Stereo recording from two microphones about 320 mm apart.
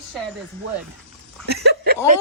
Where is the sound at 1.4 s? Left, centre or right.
Right.